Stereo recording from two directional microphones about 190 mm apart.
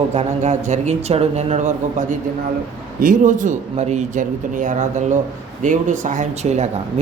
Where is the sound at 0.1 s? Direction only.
35° right (ahead or behind).